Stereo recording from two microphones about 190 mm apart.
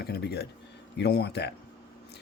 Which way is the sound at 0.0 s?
60° left (ahead or behind).